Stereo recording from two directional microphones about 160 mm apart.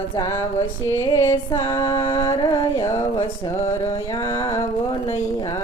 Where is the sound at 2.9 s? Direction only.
30° left (ahead or behind).